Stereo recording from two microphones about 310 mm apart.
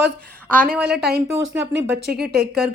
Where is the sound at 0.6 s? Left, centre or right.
Right.